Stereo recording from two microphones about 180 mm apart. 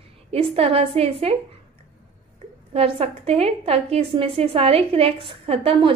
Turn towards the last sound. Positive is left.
turn(degrees=-30)  # may be behind; listen again after turning